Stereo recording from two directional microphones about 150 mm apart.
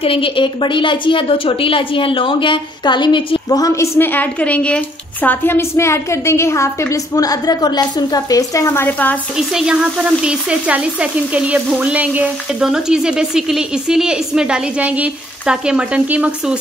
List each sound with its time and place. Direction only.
0.0 s a woman's voice: 35° left (ahead or behind)
4.0 s a woman's voice: 10° left (ahead or behind)
9.6 s sizzle: 5° right (ahead or behind)